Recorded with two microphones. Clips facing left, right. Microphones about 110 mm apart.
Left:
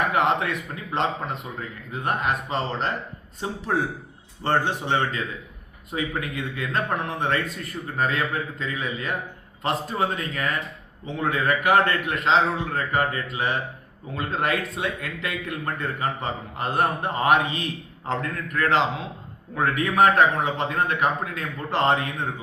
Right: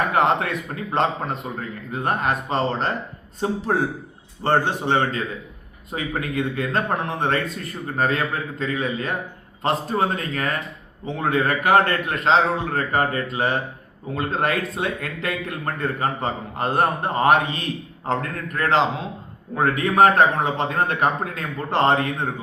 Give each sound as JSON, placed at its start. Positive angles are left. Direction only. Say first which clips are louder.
{"t": 0.1, "sound": "a man's voice", "louder": "right 3 dB", "side_deg": -40}